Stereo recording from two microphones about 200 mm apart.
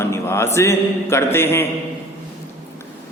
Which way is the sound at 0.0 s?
15° left (ahead or behind).